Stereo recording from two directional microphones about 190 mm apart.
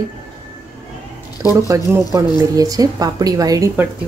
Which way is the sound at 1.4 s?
15° right (ahead or behind).